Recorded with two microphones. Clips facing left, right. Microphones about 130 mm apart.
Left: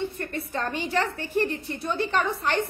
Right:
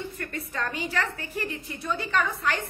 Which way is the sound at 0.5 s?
30° left (ahead or behind).